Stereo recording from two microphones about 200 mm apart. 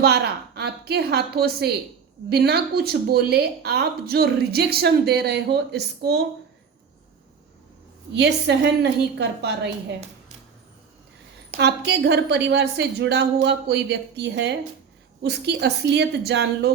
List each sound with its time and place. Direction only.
0.0 s speech: 55° right (ahead or behind)
8.1 s a woman's voice: 60° right (ahead or behind)
11.9 s a woman's voice: 60° right (ahead or behind)